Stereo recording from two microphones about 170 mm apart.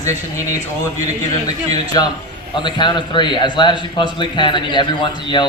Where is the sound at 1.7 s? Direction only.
25° left (ahead or behind).